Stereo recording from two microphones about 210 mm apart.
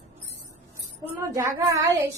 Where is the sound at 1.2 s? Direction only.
15° right (ahead or behind).